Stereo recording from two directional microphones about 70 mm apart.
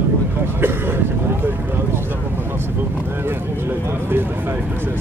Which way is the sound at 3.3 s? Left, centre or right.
Right.